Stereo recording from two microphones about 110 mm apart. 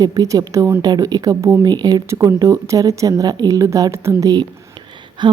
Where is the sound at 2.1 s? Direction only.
30° right (ahead or behind).